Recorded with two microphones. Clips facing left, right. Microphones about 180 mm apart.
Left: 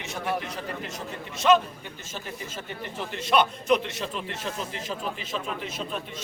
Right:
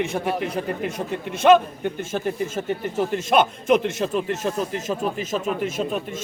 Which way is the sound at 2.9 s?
50° right (ahead or behind).